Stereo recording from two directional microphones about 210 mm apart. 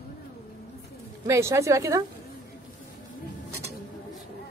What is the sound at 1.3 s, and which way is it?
Speech, 15° right (ahead or behind).